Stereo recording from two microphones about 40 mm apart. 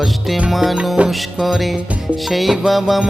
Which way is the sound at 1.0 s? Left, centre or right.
Right.